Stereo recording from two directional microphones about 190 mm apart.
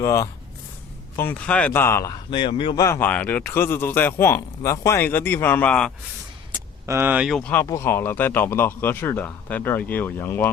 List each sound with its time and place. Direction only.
0.0 s speech: 15° left (ahead or behind)
2.8 s speech: 10° left (ahead or behind)
6.8 s speech: 10° right (ahead or behind); by 10.5 s 10° left (ahead or behind)